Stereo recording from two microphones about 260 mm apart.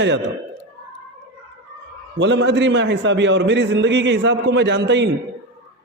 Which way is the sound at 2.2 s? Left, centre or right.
Right.